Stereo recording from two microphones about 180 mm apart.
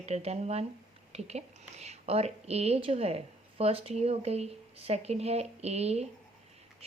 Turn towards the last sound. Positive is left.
turn(degrees=-35)  # may be behind; listen again after turning